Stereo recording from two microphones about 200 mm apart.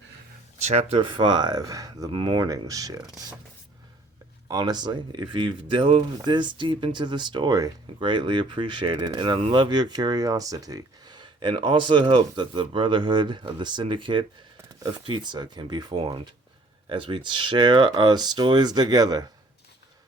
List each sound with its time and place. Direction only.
0.6 s speech: 30° right (ahead or behind); by 3.3 s 15° right (ahead or behind)
4.4 s speech: 20° right (ahead or behind)